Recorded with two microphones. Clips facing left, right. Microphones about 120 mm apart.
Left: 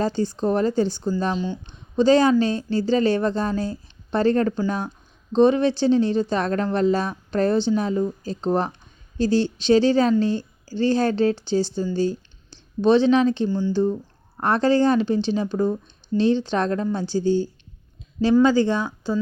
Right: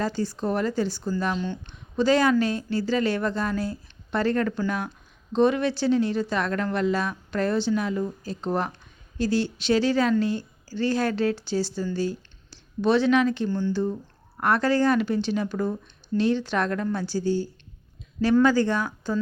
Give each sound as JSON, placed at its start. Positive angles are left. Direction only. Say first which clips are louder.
{"t": 0.0, "sound": "speech", "louder": "left 4 dB", "side_deg": 25}
{"t": 1.4, "sound": "speech", "louder": "left 3 dB", "side_deg": 15}
{"t": 2.0, "sound": "speech", "louder": "left 4 dB", "side_deg": 25}
{"t": 13.5, "sound": "speech", "louder": "left 3 dB", "side_deg": 10}
{"t": 13.7, "sound": "speech", "louder": "left 5 dB", "side_deg": 20}